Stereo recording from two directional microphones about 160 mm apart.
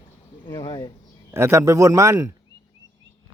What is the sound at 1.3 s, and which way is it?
A man's voice, 15° right (ahead or behind).